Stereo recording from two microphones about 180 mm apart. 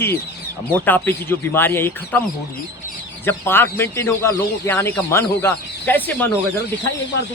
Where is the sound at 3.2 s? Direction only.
10° left (ahead or behind).